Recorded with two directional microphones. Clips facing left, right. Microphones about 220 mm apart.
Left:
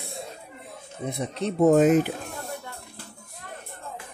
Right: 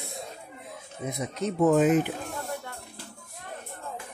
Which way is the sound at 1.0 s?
30° left (ahead or behind).